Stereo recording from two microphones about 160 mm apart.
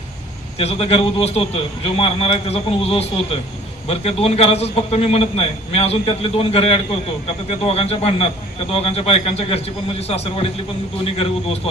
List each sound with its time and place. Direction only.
0.6 s a man's voice: 40° left (ahead or behind)